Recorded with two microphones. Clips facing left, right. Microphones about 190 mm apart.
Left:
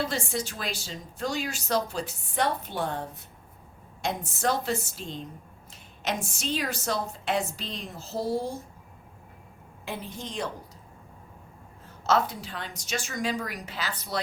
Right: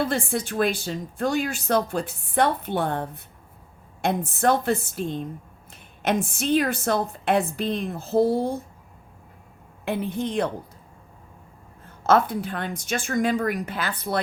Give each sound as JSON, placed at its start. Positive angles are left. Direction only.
{"t": 0.0, "sound": "a woman's voice", "side_deg": -55}
{"t": 9.8, "sound": "a woman's voice", "side_deg": -60}
{"t": 12.0, "sound": "a woman's voice", "side_deg": -55}